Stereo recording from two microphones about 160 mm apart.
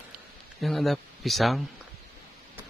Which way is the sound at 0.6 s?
Centre (ahead or behind).